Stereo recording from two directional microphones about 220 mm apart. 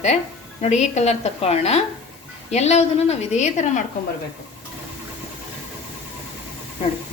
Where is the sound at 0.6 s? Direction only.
30° left (ahead or behind).